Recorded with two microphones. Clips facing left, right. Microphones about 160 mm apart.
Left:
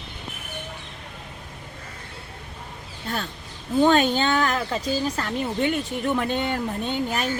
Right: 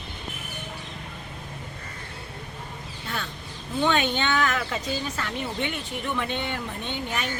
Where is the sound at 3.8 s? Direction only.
40° left (ahead or behind).